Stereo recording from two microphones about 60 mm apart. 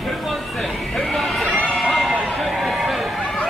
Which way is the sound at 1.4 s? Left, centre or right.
Centre.